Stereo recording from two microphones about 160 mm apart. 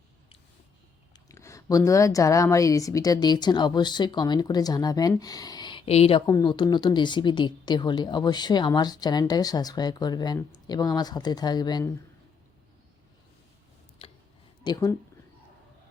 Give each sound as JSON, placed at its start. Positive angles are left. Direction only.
{"t": 1.3, "sound": "a woman's voice", "side_deg": 20}
{"t": 6.2, "sound": "a woman's voice", "side_deg": 25}
{"t": 14.0, "sound": "a sound", "side_deg": 35}
{"t": 14.6, "sound": "speech", "side_deg": 25}